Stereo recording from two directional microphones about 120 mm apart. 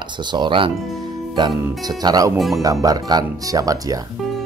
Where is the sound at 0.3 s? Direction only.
40° right (ahead or behind).